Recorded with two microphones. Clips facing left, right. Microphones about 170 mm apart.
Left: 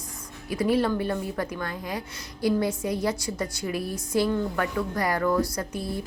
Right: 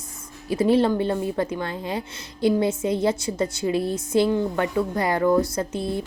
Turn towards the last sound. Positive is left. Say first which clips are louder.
# right 5 dB
turn(degrees=-25)  # may be behind; listen again after turning